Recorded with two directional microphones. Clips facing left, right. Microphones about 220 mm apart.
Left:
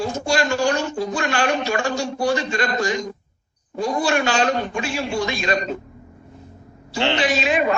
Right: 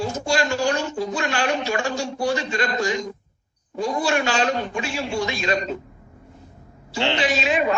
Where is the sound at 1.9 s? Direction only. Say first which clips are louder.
Left 2 dB; 90° left.